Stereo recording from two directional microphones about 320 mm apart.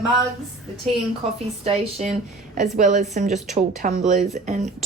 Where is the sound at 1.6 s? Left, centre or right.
Centre.